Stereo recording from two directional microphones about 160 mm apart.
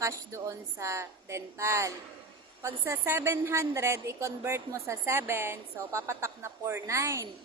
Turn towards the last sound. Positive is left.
turn(degrees=-20)  # may be behind; listen again after turning